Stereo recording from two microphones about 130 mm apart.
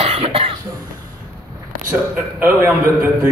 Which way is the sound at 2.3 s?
20° right (ahead or behind).